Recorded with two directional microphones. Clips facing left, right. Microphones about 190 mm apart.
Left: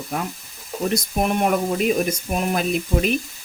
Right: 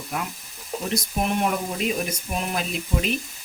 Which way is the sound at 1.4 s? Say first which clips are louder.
Left 5 dB; 50° left (ahead or behind).